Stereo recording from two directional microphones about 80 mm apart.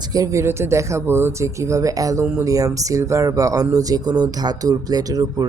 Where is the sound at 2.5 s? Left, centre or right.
Right.